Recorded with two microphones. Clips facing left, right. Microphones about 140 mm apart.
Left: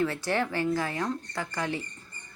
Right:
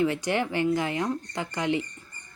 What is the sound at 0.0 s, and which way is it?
Speech, 15° right (ahead or behind).